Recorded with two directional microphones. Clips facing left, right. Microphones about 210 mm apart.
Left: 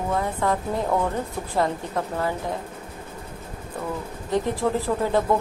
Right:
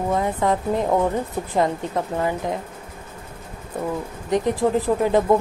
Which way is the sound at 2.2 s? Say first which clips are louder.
Right 4 dB; 20° right (ahead or behind).